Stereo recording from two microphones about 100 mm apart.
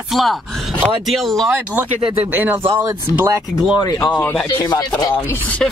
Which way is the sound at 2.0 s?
70° right (ahead or behind).